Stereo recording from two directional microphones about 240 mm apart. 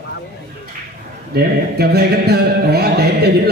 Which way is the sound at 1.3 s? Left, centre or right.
Right.